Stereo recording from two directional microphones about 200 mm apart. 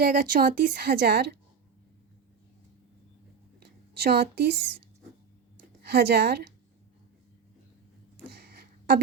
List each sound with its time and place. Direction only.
0.0 s speech: 45° right (ahead or behind)
4.0 s speech: 50° right (ahead or behind)
5.8 s speech: 55° right (ahead or behind)
8.4 s a sound: 50° right (ahead or behind)